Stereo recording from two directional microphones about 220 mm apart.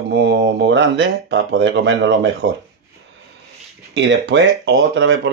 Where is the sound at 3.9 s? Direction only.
55° right (ahead or behind).